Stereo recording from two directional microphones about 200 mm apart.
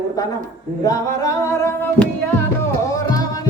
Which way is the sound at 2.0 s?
40° right (ahead or behind).